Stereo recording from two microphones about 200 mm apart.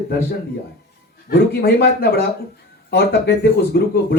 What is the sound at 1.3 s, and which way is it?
Speech, 50° left (ahead or behind).